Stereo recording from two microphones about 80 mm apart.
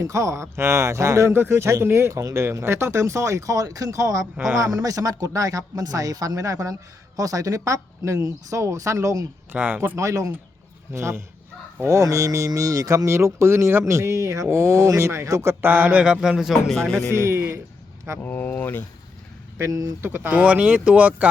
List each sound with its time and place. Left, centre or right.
0.0 s speech: right
9.5 s speech: right
10.0 s speech: right
15.6 s speech: right
16.2 s speech: centre
17.1 s speech: right
18.2 s speech: left
19.5 s speech: right
20.0 s speech: right